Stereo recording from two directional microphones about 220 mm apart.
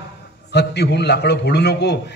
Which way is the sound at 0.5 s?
50° left (ahead or behind).